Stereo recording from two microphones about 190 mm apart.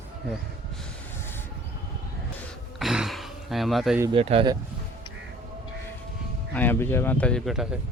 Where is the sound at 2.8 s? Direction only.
Centre (ahead or behind).